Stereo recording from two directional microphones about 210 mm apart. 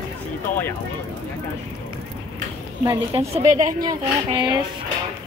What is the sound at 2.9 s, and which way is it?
Speech, 30° right (ahead or behind).